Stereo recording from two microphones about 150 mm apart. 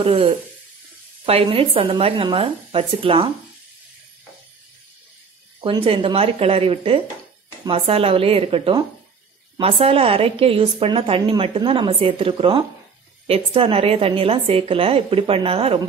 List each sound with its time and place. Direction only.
0.0 s a woman's voice: 40° right (ahead or behind)
5.6 s a woman's voice: 35° right (ahead or behind)